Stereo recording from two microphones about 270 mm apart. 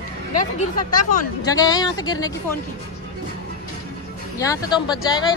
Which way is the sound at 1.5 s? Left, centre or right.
Centre.